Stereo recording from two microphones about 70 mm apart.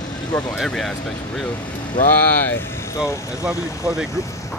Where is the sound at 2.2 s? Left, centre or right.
Left.